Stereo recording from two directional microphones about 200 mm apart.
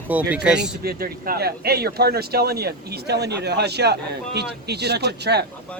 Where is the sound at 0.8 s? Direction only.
50° right (ahead or behind).